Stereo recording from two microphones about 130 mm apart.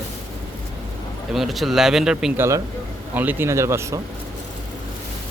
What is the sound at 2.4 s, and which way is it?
Speech, 25° right (ahead or behind).